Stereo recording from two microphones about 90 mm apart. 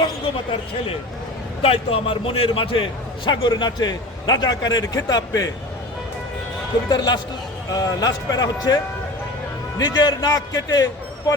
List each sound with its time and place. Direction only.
1.6 s a man's voice: 90° left; by 5.5 s 45° left (ahead or behind)
6.8 s speech: 45° left (ahead or behind)